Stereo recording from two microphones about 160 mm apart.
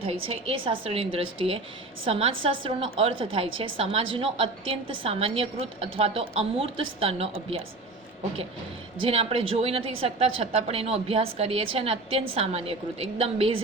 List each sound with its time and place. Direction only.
0.0 s a woman's voice: 35° right (ahead or behind)
9.0 s a woman's voice: 40° right (ahead or behind)